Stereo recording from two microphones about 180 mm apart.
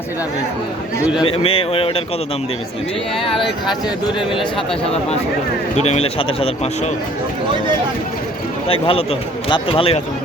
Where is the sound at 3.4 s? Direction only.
Centre (ahead or behind).